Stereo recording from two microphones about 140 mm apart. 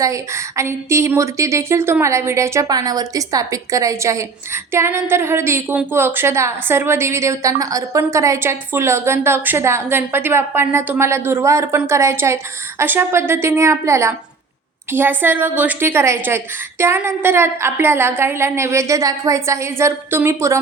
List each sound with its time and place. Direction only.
0.0 s a woman's voice: 20° right (ahead or behind)